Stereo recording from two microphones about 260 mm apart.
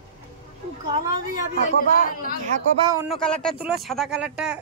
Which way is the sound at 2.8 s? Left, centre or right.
Centre.